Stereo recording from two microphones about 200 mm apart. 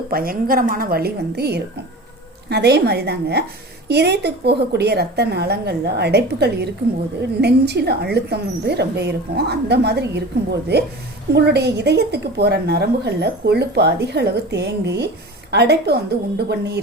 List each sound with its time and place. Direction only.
0.1 s a woman's voice: 45° right (ahead or behind)